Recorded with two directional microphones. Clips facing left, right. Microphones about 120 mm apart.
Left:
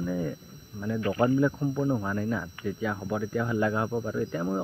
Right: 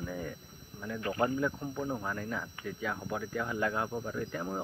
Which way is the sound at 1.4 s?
20° left (ahead or behind).